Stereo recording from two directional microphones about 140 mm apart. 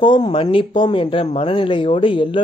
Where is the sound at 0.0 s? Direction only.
35° left (ahead or behind).